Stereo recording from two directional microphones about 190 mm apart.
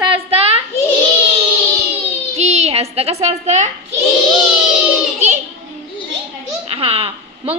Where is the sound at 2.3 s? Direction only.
35° right (ahead or behind).